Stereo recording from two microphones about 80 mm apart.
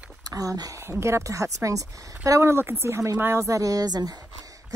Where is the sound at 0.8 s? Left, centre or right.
Right.